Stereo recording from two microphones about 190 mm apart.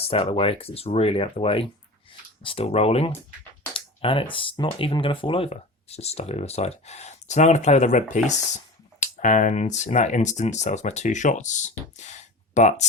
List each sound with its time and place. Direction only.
0.1 s speech: 30° left (ahead or behind)